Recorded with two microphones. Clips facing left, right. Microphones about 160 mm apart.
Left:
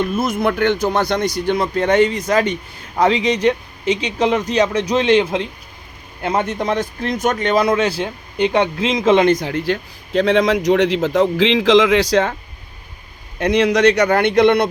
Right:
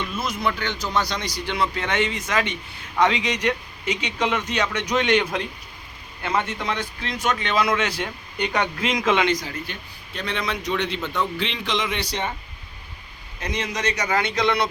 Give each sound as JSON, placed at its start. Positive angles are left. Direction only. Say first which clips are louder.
{"t": 0.0, "sound": "speech", "louder": "left 8 dB", "side_deg": 50}
{"t": 6.2, "sound": "speech", "louder": "left 6 dB", "side_deg": 40}
{"t": 9.2, "sound": "a man's voice", "louder": "left 9 dB", "side_deg": 55}
{"t": 13.4, "sound": "a man's voice", "louder": "left 14 dB", "side_deg": 70}